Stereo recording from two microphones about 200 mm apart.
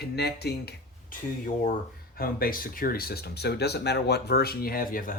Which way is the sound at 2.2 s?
45° left (ahead or behind).